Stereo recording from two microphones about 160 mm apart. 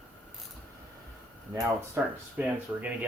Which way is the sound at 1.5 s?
15° right (ahead or behind).